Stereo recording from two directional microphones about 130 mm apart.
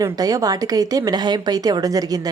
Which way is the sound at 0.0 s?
25° right (ahead or behind).